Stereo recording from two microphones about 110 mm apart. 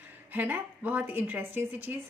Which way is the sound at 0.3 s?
15° right (ahead or behind).